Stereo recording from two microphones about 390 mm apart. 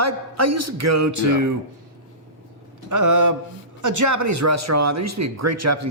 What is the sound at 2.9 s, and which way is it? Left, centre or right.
Speech, right.